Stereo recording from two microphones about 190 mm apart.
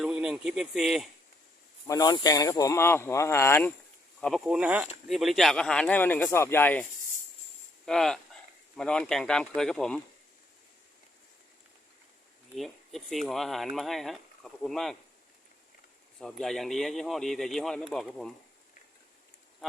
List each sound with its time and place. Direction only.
0.0 s speech: 5° right (ahead or behind)
1.9 s speech: 20° left (ahead or behind)
4.2 s speech: centre (ahead or behind)
7.9 s speech: centre (ahead or behind)
12.5 s speech: centre (ahead or behind)
16.1 s speech: centre (ahead or behind)